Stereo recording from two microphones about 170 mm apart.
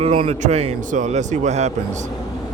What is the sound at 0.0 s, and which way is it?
A man's voice, 35° right (ahead or behind).